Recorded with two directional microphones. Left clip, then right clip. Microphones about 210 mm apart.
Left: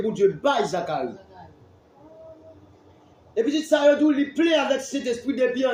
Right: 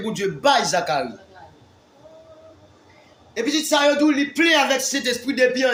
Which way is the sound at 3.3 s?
35° right (ahead or behind).